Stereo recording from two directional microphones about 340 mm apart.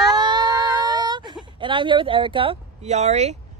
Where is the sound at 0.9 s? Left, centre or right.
Centre.